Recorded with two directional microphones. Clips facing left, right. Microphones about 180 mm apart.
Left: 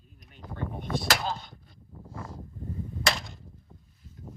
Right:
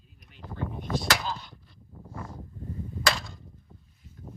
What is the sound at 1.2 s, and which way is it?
Chopping, 50° left (ahead or behind).